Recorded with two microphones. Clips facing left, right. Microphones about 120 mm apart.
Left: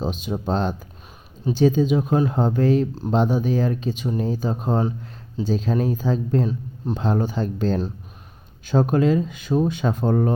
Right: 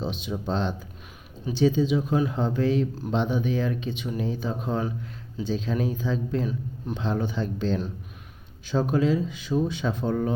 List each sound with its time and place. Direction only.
0.0 s speech: 45° left (ahead or behind)
6.9 s speech: 45° left (ahead or behind)